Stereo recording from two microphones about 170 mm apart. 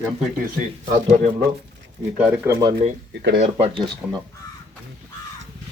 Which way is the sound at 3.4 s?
40° right (ahead or behind).